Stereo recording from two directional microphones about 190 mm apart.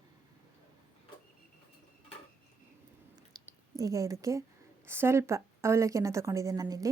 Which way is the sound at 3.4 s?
20° right (ahead or behind).